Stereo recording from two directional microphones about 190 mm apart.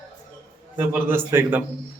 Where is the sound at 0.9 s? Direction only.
10° right (ahead or behind).